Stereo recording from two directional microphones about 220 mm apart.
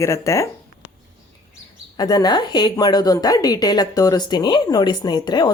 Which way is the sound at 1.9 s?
15° left (ahead or behind).